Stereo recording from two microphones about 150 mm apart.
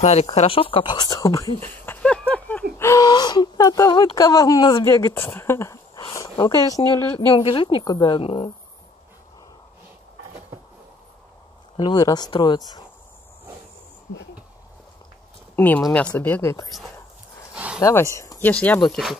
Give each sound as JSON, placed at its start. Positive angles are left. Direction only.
{"t": 0.0, "sound": "speech", "side_deg": 45}
{"t": 2.8, "sound": "speech", "side_deg": 20}
{"t": 4.8, "sound": "a woman's voice", "side_deg": 20}
{"t": 11.7, "sound": "speech", "side_deg": 30}
{"t": 15.5, "sound": "speech", "side_deg": 10}
{"t": 17.7, "sound": "speech", "side_deg": 25}
{"t": 18.5, "sound": "speech", "side_deg": 10}